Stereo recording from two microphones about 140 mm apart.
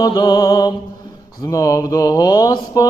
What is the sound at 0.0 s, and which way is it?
Mantra, 30° left (ahead or behind).